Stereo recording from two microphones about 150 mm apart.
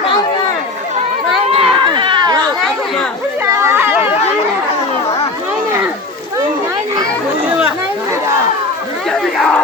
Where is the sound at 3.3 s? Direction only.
15° right (ahead or behind).